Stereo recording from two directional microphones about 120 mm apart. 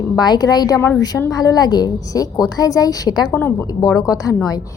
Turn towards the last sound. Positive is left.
turn(degrees=30)  # may be behind; listen again after turning